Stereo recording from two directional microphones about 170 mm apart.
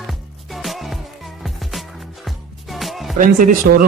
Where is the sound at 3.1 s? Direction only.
50° right (ahead or behind).